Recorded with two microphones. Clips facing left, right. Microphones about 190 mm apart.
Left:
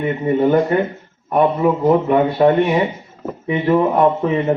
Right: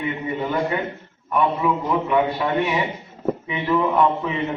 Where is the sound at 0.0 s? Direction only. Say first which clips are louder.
Left 9 dB; 45° left (ahead or behind).